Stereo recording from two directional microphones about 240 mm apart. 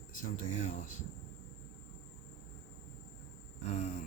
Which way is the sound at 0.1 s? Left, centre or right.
Left.